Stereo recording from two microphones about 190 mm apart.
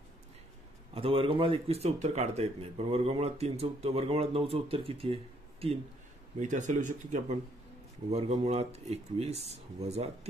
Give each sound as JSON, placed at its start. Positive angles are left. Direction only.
{"t": 0.9, "sound": "speech", "side_deg": -30}